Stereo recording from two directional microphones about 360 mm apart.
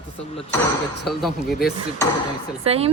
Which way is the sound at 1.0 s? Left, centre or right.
Centre.